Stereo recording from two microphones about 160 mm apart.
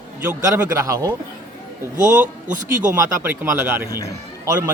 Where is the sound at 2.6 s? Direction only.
15° right (ahead or behind).